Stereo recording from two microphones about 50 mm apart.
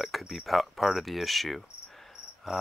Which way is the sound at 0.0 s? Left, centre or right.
Centre.